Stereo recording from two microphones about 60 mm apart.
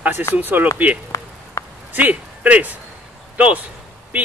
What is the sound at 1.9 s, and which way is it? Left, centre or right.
Speech, right.